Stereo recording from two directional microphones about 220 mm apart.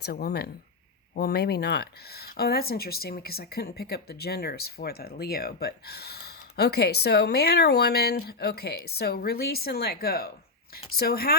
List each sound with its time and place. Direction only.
0.0 s speech: 45° left (ahead or behind)